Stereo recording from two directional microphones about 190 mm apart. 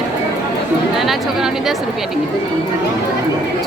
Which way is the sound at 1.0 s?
Centre (ahead or behind).